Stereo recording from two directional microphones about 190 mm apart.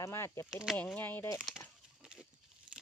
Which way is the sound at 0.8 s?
10° left (ahead or behind).